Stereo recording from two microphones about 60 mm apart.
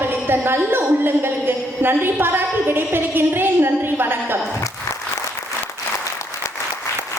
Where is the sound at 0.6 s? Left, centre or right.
Right.